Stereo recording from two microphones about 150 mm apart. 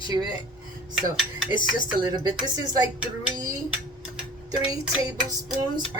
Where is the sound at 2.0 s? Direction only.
25° right (ahead or behind).